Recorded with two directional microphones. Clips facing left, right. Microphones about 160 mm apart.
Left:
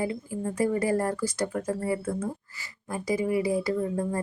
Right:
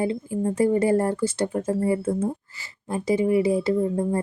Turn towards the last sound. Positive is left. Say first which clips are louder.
# right 5 dB
turn(degrees=-25)  # may be behind; listen again after turning